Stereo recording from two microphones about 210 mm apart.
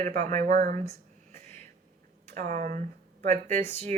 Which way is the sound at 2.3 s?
35° right (ahead or behind).